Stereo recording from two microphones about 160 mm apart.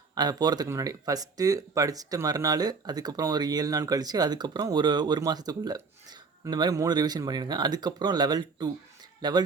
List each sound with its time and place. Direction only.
0.1 s speech: 25° right (ahead or behind)